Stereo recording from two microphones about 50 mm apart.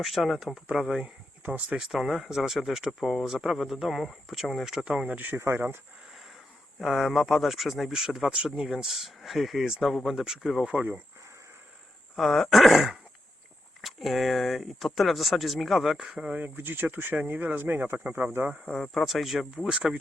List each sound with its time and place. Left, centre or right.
0.0 s speech: centre
1.4 s a sound: right
1.8 s speech: centre
4.9 s speech: centre
5.1 s speech: right
5.4 s speech: right
6.7 s speech: centre
10.7 s speech: right
12.1 s speech: centre
16.3 s speech: right
18.6 s speech: centre
19.1 s speech: centre